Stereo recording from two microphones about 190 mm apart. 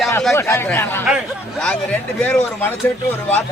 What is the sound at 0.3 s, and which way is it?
Speech, 15° left (ahead or behind).